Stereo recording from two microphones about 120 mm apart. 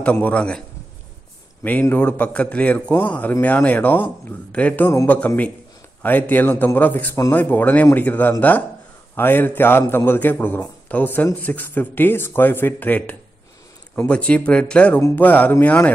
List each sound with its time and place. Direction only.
0.0 s a man's voice: 10° left (ahead or behind)
1.6 s a man's voice: 15° left (ahead or behind)